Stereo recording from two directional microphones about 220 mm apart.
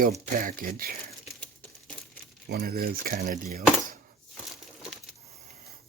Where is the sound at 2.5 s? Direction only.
40° right (ahead or behind).